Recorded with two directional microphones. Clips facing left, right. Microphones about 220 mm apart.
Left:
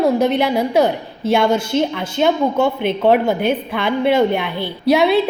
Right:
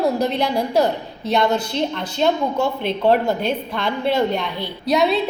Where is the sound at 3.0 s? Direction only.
65° left (ahead or behind).